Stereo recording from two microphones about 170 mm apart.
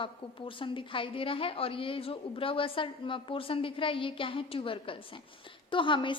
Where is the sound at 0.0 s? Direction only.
30° left (ahead or behind).